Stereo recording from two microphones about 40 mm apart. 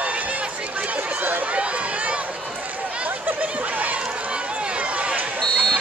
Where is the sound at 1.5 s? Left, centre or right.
Right.